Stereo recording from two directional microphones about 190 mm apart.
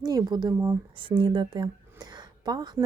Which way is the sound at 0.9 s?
25° right (ahead or behind).